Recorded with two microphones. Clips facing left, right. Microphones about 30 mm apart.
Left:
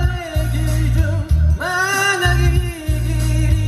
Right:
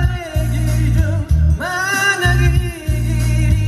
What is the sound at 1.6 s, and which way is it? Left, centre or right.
Music, centre.